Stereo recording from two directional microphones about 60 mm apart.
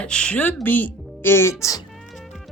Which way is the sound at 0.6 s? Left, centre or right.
Left.